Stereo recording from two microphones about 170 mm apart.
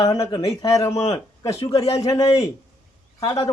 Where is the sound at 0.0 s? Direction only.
20° left (ahead or behind).